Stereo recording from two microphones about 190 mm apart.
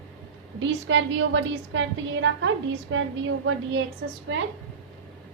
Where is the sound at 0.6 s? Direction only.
75° right (ahead or behind).